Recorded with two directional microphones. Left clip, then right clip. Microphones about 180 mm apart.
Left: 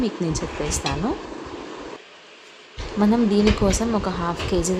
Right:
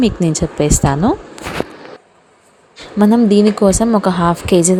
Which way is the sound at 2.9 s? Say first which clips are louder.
Right 8 dB; 40° right (ahead or behind).